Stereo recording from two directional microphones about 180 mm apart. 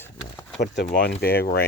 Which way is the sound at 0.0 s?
10° left (ahead or behind).